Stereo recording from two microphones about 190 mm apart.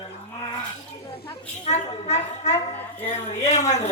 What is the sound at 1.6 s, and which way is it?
A woman's voice, 35° left (ahead or behind).